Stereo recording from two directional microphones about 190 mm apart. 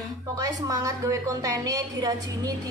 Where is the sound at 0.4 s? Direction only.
20° right (ahead or behind).